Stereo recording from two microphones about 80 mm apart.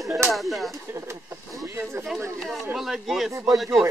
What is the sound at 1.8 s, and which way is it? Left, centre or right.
Speech, right.